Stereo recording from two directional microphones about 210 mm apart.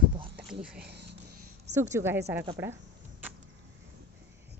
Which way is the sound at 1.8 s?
10° right (ahead or behind).